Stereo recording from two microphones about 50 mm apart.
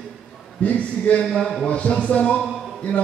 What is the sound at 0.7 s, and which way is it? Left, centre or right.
Speech, left.